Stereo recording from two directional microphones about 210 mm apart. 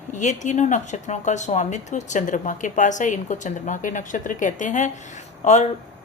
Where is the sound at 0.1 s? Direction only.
35° left (ahead or behind).